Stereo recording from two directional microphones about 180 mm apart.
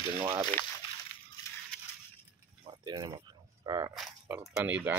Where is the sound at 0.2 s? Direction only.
25° right (ahead or behind).